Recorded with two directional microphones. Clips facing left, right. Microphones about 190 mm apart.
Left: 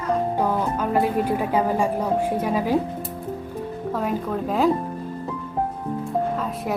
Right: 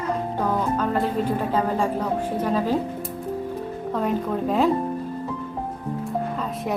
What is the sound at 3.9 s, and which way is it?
Speech, centre (ahead or behind).